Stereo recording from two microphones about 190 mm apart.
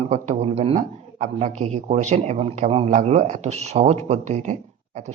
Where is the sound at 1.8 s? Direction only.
35° right (ahead or behind).